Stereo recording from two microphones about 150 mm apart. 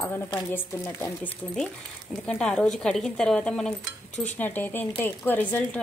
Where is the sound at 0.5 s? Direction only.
15° left (ahead or behind).